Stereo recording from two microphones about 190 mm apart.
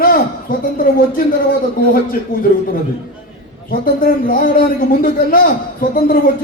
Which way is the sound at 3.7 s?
50° left (ahead or behind).